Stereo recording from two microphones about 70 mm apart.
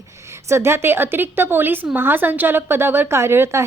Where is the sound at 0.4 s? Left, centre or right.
Right.